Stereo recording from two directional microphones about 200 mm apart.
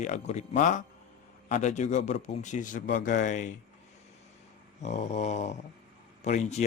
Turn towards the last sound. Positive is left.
turn(degrees=35)  # may be behind; listen again after turning